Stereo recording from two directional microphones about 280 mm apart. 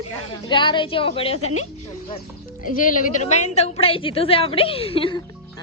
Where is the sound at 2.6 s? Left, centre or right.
Left.